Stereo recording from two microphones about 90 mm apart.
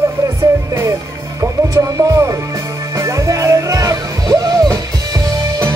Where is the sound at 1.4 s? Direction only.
35° right (ahead or behind).